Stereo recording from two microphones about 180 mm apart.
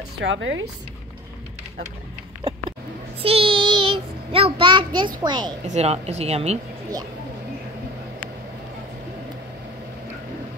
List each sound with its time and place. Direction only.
0.2 s speech: 85° right
2.4 s a sound: 30° right (ahead or behind)
3.2 s child singing: 30° right (ahead or behind)
5.2 s a woman's voice: 25° right (ahead or behind)
5.7 s speech: 35° right (ahead or behind)